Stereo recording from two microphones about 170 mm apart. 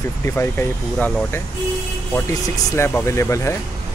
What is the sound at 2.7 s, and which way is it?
Speech, 15° left (ahead or behind).